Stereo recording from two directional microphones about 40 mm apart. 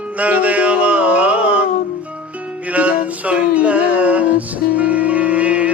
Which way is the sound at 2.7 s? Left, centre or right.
Right.